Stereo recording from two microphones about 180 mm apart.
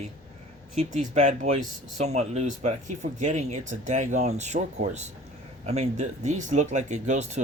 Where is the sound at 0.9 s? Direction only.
40° right (ahead or behind).